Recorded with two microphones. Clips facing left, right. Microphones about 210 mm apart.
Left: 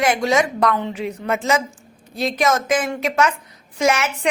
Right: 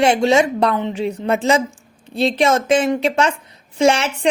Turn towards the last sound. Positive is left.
turn(degrees=-30)  # may be behind; listen again after turning